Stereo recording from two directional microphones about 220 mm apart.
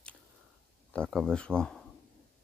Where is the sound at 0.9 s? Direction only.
5° left (ahead or behind).